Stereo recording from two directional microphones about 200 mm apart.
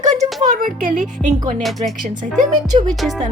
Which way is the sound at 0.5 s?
45° right (ahead or behind).